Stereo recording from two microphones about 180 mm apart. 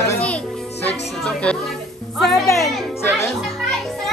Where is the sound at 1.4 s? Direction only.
5° left (ahead or behind).